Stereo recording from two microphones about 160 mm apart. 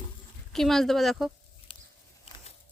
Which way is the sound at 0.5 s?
Centre (ahead or behind).